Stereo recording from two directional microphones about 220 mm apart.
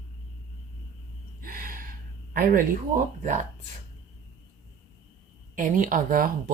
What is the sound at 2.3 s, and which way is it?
Speech, 40° right (ahead or behind).